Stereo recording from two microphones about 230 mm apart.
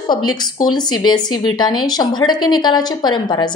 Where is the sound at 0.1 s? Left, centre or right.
Centre.